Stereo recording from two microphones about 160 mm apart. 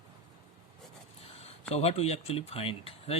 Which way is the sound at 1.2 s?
40° left (ahead or behind).